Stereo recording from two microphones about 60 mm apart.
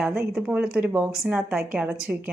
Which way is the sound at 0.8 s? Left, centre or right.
Centre.